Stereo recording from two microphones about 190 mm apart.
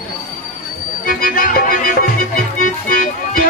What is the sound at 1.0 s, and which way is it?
Music, 50° left (ahead or behind).